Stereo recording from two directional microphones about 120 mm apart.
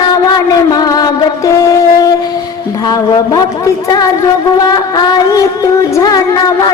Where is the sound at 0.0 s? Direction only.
35° left (ahead or behind).